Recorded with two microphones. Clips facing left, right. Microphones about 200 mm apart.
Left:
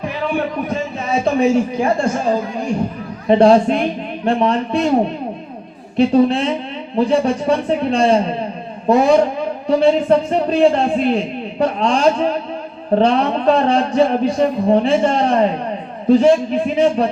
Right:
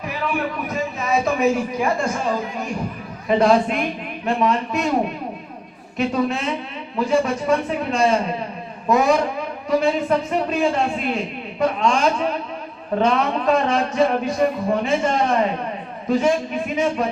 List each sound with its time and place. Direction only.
0.0 s a man's voice: 30° left (ahead or behind)
6.0 s a man's voice: 30° left (ahead or behind)